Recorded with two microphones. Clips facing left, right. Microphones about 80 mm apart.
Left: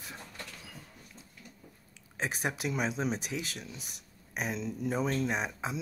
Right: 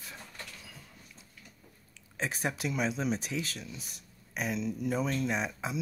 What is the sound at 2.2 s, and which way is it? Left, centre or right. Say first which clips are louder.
Speech: even; centre.